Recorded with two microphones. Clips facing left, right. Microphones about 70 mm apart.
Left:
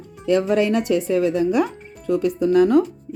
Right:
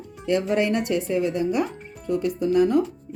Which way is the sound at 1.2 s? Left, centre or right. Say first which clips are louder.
Left 5 dB; left.